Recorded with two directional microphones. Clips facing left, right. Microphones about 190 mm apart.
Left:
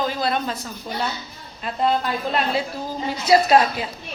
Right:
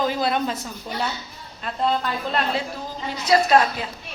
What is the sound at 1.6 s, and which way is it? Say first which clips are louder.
A woman's voice: left 2 dB; 5° left (ahead or behind).